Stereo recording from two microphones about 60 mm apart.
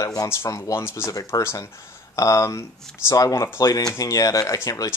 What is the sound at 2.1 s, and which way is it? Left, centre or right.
Speech, left.